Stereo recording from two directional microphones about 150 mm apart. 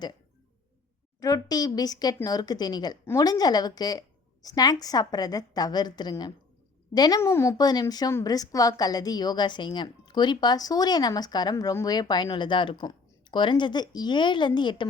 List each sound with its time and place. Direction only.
1.2 s a woman's voice: 25° left (ahead or behind)